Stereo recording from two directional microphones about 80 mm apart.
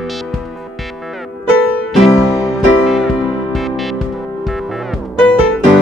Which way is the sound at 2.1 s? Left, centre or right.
Left.